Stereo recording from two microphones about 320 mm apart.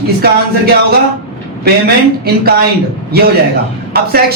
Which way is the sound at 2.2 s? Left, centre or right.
Right.